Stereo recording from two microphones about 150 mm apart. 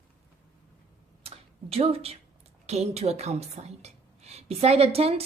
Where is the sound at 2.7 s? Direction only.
45° right (ahead or behind).